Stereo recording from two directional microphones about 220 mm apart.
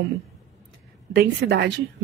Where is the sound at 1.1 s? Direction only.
50° right (ahead or behind).